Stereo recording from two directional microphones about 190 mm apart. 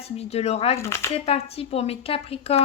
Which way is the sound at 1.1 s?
30° left (ahead or behind).